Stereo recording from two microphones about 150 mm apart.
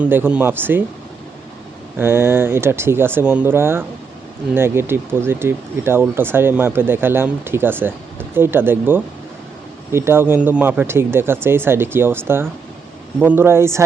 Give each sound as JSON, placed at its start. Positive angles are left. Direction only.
{"t": 0.0, "sound": "speech", "side_deg": -10}
{"t": 2.0, "sound": "speech", "side_deg": -15}